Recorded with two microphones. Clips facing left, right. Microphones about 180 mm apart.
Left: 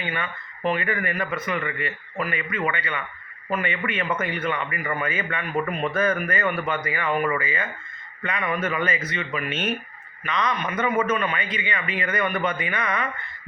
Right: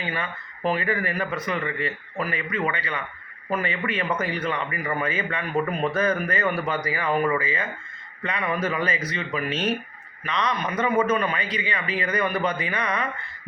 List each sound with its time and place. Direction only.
0.0 s a man's voice: 35° right (ahead or behind)